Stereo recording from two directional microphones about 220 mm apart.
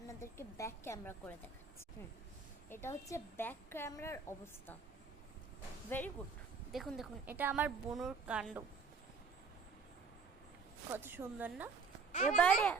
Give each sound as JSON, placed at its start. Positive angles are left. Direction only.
{"t": 0.1, "sound": "a woman's voice", "side_deg": 15}
{"t": 2.6, "sound": "a woman's voice", "side_deg": 10}
{"t": 5.9, "sound": "a woman's voice", "side_deg": 10}
{"t": 10.9, "sound": "a woman's voice", "side_deg": -10}
{"t": 12.4, "sound": "a woman's voice", "side_deg": 5}